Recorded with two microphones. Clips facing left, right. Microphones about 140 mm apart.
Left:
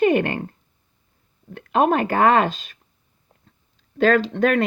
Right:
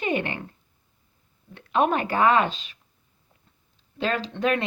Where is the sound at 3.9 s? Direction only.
50° left (ahead or behind).